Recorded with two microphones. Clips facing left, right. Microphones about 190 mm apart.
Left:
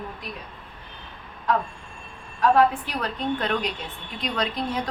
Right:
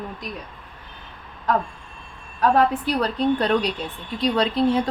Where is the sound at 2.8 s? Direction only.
35° right (ahead or behind).